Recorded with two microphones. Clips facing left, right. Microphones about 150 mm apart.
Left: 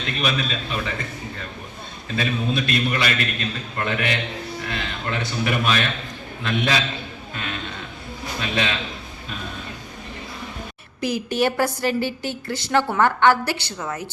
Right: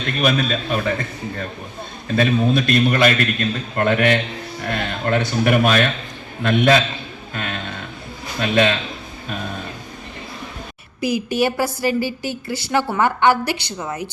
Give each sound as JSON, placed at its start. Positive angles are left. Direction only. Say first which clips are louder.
{"t": 0.0, "sound": "a man's voice", "louder": "right 5 dB", "side_deg": -45}
{"t": 7.3, "sound": "music", "louder": "right 4 dB", "side_deg": -50}
{"t": 8.4, "sound": "a man's voice", "louder": "right 8 dB", "side_deg": -50}
{"t": 11.0, "sound": "a woman's voice", "louder": "right 2 dB", "side_deg": -10}